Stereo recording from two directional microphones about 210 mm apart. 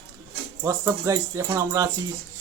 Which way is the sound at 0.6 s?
15° right (ahead or behind).